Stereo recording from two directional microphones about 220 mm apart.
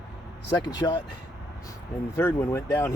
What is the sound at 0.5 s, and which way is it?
Speech, 20° left (ahead or behind).